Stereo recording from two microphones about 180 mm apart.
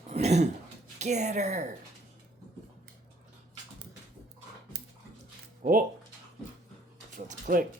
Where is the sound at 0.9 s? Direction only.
40° right (ahead or behind).